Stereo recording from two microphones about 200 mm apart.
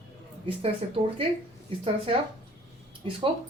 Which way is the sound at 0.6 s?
30° right (ahead or behind).